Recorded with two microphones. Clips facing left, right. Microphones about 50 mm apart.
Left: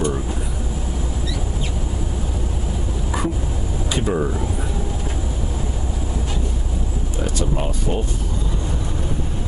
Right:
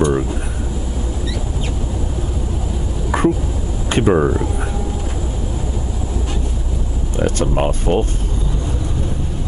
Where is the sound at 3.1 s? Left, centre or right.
Right.